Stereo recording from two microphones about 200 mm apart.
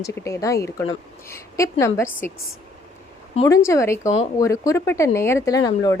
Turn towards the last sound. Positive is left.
turn(degrees=20)  # may be behind; listen again after turning